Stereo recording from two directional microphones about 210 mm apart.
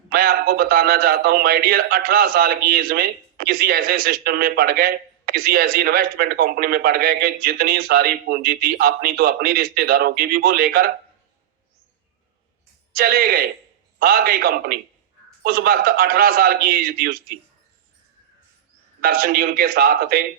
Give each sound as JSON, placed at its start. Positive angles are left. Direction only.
{"t": 0.1, "sound": "a man's voice", "side_deg": -45}
{"t": 12.9, "sound": "a man's voice", "side_deg": -45}
{"t": 19.0, "sound": "a man's voice", "side_deg": -45}